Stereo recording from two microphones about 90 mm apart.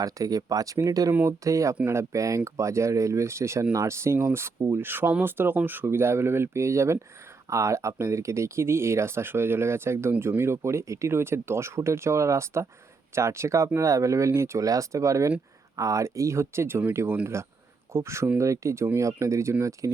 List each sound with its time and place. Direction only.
0.0 s speech: 40° right (ahead or behind)